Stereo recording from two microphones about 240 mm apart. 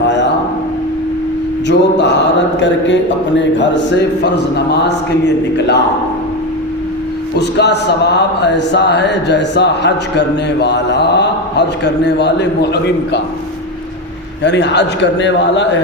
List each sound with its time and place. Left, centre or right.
1.6 s speech: left
7.3 s speech: left
14.4 s speech: left